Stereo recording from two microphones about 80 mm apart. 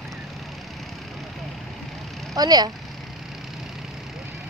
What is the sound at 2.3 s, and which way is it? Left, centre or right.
Speech, right.